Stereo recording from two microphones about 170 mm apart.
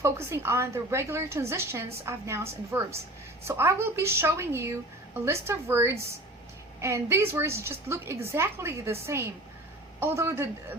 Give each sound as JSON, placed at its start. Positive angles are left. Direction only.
{"t": 0.0, "sound": "a woman's voice", "side_deg": -15}